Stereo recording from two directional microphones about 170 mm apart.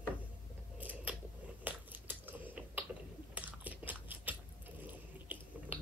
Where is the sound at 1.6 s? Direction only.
10° right (ahead or behind).